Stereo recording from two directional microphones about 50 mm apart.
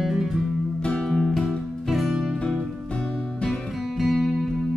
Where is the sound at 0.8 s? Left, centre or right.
Centre.